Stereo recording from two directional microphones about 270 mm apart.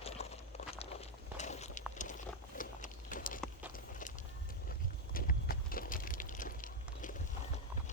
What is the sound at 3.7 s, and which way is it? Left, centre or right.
Music, left.